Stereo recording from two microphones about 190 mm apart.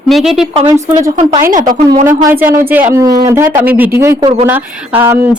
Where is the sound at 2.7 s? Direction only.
10° right (ahead or behind).